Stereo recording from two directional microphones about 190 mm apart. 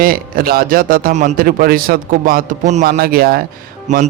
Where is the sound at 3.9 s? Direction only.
40° right (ahead or behind).